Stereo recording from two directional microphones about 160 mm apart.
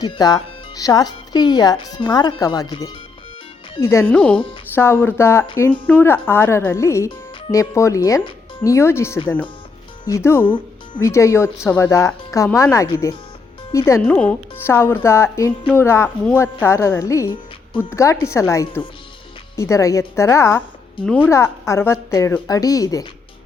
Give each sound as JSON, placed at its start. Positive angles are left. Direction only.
{"t": 0.0, "sound": "speech", "side_deg": 25}
{"t": 10.4, "sound": "speech", "side_deg": 30}
{"t": 11.1, "sound": "speech", "side_deg": 20}